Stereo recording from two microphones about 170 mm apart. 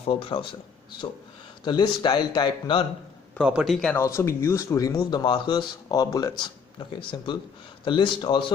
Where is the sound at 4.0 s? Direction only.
15° left (ahead or behind).